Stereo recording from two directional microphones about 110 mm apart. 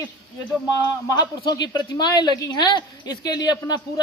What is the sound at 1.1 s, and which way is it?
Speech, 35° left (ahead or behind).